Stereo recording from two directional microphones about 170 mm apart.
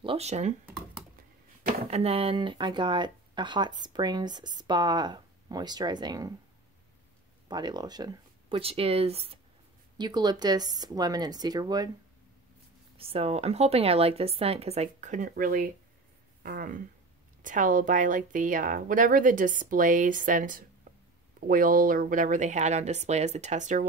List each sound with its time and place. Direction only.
0.0 s a woman's voice: 35° right (ahead or behind)
1.9 s speech: 35° right (ahead or behind)
7.4 s speech: 25° right (ahead or behind)
9.9 s speech: 25° right (ahead or behind)
12.9 s a woman's voice: 35° right (ahead or behind)